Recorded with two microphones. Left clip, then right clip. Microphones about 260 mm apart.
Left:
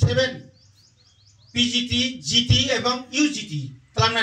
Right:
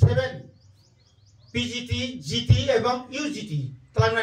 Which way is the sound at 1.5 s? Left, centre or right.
Right.